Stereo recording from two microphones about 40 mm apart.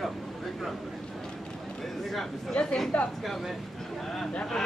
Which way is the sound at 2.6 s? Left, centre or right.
Left.